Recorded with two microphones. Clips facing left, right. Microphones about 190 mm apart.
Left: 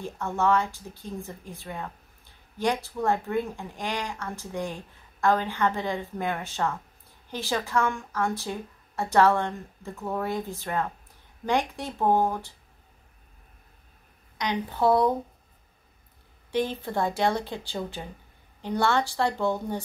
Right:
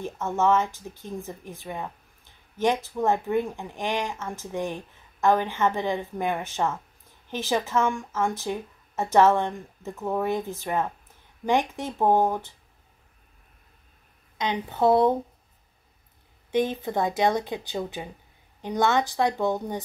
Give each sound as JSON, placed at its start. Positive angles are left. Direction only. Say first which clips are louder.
{"t": 0.0, "sound": "a woman's voice", "louder": "right 2 dB", "side_deg": -20}
{"t": 14.4, "sound": "speech", "louder": "right 2 dB", "side_deg": -20}
{"t": 16.5, "sound": "a woman's voice", "louder": "right 2 dB", "side_deg": -20}